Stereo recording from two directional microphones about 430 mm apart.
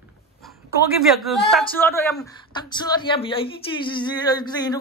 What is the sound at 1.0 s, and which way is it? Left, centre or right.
A man's voice, centre.